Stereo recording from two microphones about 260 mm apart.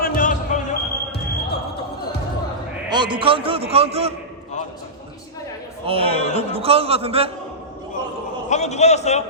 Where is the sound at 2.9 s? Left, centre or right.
Centre.